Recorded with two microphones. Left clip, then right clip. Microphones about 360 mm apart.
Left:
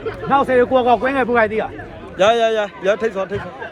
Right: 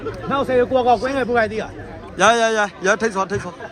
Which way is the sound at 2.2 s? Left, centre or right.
Centre.